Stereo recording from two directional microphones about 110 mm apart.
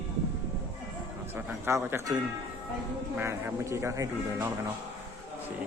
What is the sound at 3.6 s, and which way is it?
Speech, 25° right (ahead or behind).